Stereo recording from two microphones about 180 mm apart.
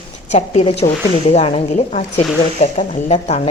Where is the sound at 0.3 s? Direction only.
35° left (ahead or behind).